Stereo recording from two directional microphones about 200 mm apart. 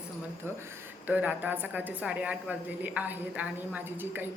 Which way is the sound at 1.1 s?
10° right (ahead or behind).